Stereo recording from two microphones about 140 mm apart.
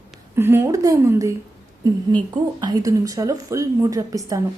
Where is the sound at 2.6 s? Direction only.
30° right (ahead or behind).